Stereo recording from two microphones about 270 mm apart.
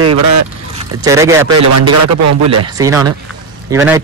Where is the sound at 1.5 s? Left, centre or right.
Right.